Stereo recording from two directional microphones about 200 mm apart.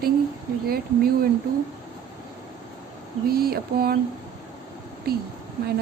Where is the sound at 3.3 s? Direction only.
50° right (ahead or behind).